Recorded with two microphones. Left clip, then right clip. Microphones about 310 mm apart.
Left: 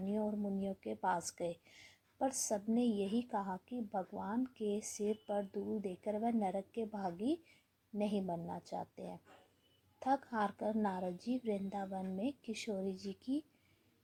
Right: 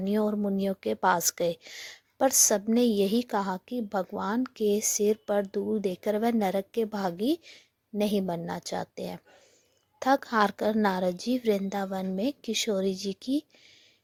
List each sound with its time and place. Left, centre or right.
0.0 s a woman's voice: right